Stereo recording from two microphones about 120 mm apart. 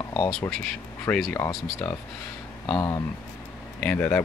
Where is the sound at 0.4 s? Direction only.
10° left (ahead or behind).